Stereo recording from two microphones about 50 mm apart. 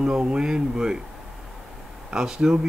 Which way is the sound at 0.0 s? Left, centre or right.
Centre.